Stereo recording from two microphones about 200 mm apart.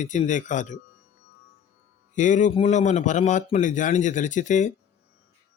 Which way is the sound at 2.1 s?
40° left (ahead or behind).